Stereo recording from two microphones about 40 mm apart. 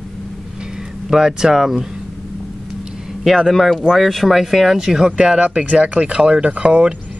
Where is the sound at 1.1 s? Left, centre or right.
Centre.